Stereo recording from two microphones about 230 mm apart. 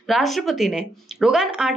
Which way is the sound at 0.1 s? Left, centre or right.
Centre.